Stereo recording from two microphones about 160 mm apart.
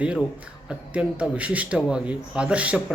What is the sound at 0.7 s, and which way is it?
A man's voice, 10° right (ahead or behind).